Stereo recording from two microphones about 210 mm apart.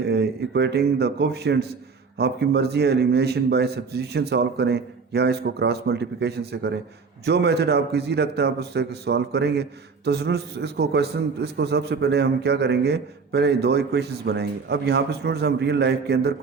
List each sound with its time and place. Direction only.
0.1 s a man's voice: 50° right (ahead or behind)